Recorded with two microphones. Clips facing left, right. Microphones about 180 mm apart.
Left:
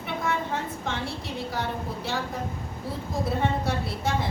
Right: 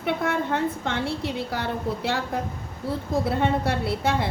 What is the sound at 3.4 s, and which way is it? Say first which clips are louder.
Speech: right 3 dB; 65° right (ahead or behind).